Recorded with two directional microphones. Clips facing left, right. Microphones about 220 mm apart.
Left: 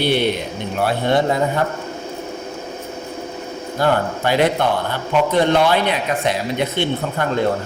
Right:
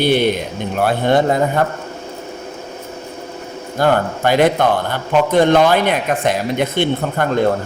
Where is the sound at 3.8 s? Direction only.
50° right (ahead or behind).